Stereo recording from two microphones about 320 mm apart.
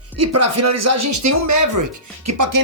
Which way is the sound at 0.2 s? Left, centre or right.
Right.